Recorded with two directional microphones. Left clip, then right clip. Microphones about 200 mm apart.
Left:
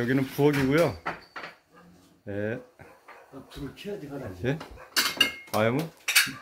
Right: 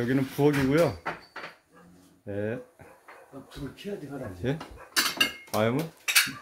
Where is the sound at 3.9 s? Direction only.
30° right (ahead or behind).